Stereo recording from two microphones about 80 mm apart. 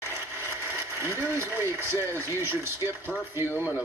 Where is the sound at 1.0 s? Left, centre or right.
Right.